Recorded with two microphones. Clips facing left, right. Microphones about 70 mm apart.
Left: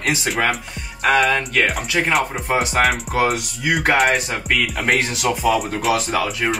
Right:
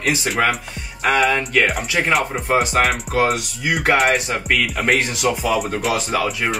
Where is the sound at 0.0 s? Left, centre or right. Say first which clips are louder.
Right 1 dB; centre.